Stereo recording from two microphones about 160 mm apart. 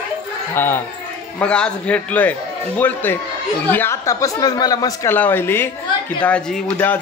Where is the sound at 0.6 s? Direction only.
15° left (ahead or behind).